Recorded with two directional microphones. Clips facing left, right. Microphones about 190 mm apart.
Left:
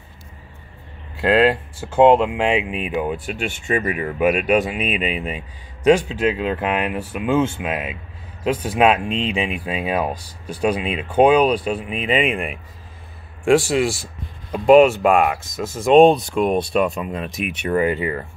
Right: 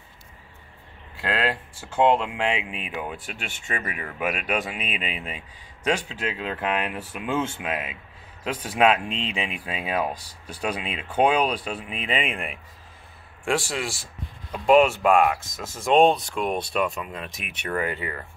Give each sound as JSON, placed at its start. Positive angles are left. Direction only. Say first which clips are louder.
{"t": 1.2, "sound": "speech", "louder": "left 11 dB", "side_deg": 20}
{"t": 16.7, "sound": "speech", "louder": "left 6 dB", "side_deg": 30}
{"t": 17.4, "sound": "speech", "louder": "left 9 dB", "side_deg": 15}